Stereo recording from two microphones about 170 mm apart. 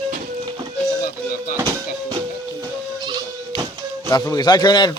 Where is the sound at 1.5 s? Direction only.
25° right (ahead or behind).